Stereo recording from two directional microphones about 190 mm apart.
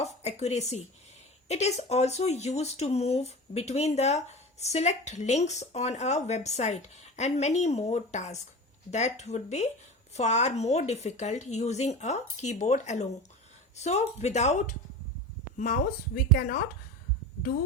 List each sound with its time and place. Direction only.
0.0 s a woman's voice: 35° left (ahead or behind)